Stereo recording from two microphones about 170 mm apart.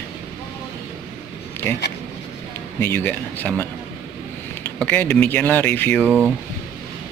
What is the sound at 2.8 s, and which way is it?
Speech, 10° left (ahead or behind).